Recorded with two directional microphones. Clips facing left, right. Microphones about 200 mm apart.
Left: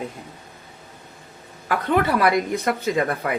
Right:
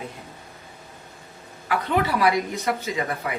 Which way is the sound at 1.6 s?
50° left (ahead or behind).